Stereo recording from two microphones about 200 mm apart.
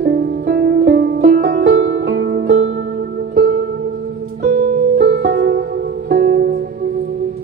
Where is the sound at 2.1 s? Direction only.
60° right (ahead or behind).